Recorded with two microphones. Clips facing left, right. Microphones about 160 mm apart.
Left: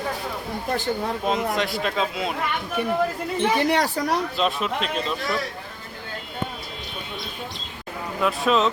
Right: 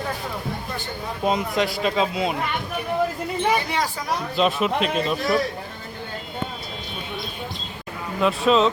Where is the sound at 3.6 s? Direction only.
70° left (ahead or behind).